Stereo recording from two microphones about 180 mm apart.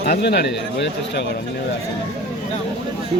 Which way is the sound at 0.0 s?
60° left (ahead or behind).